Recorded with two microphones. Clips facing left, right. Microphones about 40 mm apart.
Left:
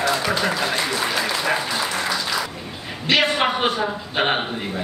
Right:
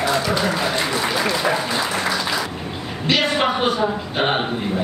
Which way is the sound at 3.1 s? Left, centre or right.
Centre.